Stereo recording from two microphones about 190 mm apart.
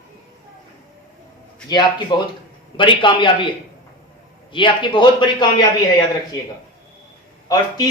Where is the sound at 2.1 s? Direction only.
25° left (ahead or behind).